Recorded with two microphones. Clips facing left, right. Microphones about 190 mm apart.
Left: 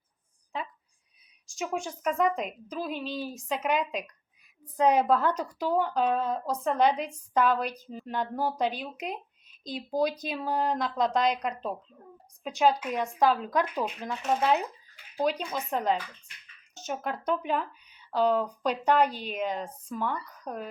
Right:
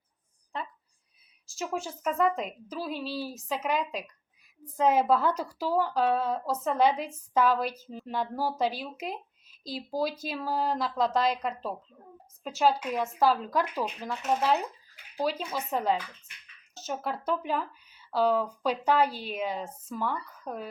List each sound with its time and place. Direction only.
1.5 s speech: 5° right (ahead or behind)
2.7 s speech: 15° left (ahead or behind)
3.0 s speech: 5° right (ahead or behind)